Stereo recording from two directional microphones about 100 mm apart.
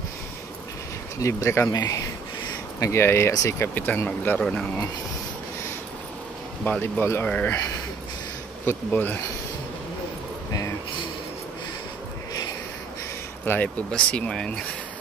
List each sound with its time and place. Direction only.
1.2 s speech: 30° left (ahead or behind)
1.7 s speech: 40° left (ahead or behind)
2.8 s speech: 25° left (ahead or behind)
6.6 s speech: 20° left (ahead or behind)
8.6 s speech: 20° left (ahead or behind)
13.5 s speech: 15° left (ahead or behind)